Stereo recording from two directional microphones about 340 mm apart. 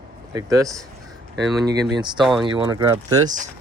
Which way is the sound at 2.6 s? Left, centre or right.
Centre.